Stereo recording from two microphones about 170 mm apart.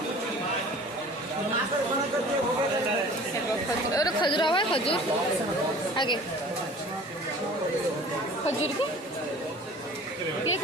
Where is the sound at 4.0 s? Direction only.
25° left (ahead or behind).